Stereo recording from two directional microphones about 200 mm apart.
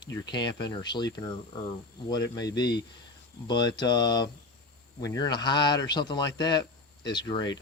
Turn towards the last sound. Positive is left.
turn(degrees=20)  # may be behind; listen again after turning